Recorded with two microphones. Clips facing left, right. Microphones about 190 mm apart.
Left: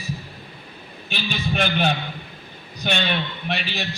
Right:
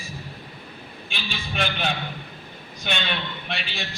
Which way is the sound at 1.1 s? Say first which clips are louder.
Left 8 dB; 40° left (ahead or behind).